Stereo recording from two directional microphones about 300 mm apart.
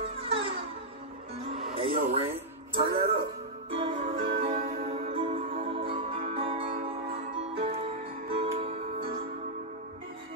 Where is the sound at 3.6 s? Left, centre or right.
Centre.